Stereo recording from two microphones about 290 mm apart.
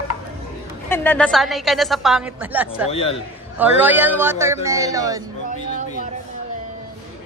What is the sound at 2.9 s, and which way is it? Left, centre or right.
Speech, left.